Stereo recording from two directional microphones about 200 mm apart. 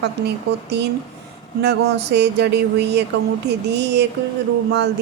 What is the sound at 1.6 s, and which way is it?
Speech, 55° right (ahead or behind).